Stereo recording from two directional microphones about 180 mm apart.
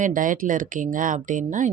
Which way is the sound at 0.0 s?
50° right (ahead or behind).